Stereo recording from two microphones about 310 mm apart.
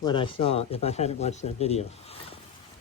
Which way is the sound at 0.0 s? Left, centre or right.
Centre.